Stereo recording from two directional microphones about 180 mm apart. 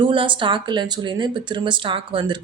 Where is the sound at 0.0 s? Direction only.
25° right (ahead or behind).